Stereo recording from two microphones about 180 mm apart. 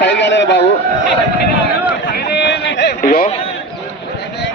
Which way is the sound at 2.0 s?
60° left (ahead or behind).